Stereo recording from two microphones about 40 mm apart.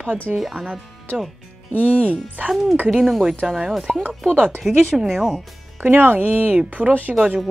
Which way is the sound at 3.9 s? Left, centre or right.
Centre.